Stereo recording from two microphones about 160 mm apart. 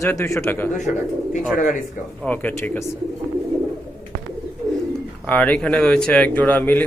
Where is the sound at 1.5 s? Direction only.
60° left (ahead or behind).